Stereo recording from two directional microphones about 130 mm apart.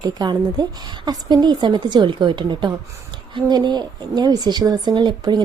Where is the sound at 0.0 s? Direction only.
35° right (ahead or behind).